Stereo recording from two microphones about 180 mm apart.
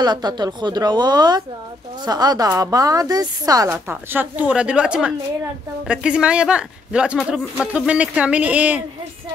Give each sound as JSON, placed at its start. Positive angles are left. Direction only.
{"t": 0.0, "sound": "a woman's voice", "side_deg": -25}